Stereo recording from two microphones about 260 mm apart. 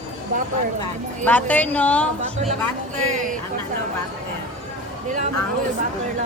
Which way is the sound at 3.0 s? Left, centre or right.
Right.